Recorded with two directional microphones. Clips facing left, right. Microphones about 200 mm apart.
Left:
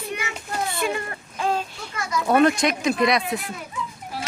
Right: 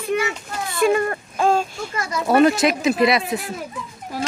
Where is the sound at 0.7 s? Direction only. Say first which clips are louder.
Right 9 dB; 45° right (ahead or behind).